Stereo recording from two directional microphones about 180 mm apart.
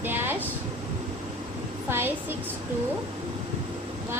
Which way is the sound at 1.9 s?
10° right (ahead or behind).